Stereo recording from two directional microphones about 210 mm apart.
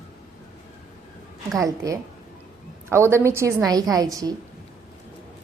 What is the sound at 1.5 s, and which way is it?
A woman's voice, 15° right (ahead or behind).